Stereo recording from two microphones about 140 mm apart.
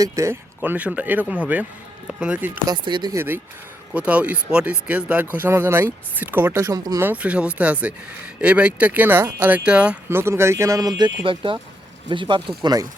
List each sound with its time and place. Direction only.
0.0 s speech: 20° right (ahead or behind)
2.6 s speech: 35° right (ahead or behind)
3.2 s speech: 15° right (ahead or behind)
7.0 s speech: 10° right (ahead or behind); by 12.9 s 30° right (ahead or behind)